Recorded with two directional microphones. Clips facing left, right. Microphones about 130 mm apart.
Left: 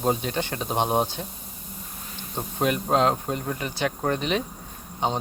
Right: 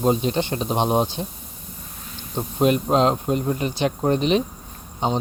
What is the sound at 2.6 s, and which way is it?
Speech, 20° right (ahead or behind).